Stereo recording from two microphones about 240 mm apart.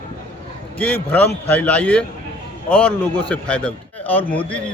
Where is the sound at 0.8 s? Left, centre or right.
Centre.